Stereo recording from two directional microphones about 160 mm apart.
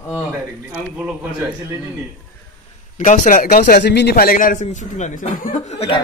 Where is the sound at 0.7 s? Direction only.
10° right (ahead or behind).